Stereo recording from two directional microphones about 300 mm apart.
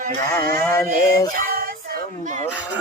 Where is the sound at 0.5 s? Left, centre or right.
Centre.